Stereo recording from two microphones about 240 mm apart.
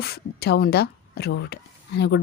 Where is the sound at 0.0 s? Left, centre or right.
Left.